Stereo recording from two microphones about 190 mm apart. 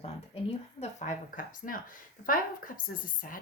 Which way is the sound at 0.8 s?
35° left (ahead or behind).